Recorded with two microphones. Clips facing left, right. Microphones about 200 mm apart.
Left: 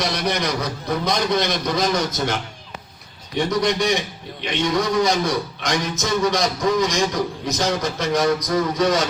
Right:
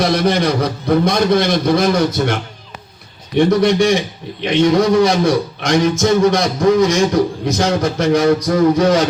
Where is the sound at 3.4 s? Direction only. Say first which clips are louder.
Right 8 dB; 55° right (ahead or behind).